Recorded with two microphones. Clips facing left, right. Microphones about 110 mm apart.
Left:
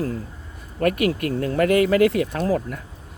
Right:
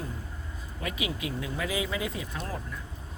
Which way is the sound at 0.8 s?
60° left (ahead or behind).